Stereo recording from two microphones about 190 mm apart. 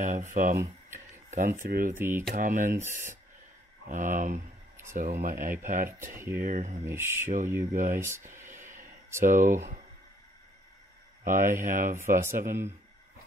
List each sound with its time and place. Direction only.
0.0 s speech: 40° right (ahead or behind)
2.0 s speech: 10° right (ahead or behind)
2.3 s speech: 45° right (ahead or behind)
3.9 s speech: 45° right (ahead or behind)
6.8 s speech: 15° right (ahead or behind)
7.7 s speech: 40° right (ahead or behind)
8.0 s speech: 15° right (ahead or behind)
9.2 s speech: 45° right (ahead or behind)
11.2 s speech: 45° right (ahead or behind)
12.4 s speech: 15° right (ahead or behind)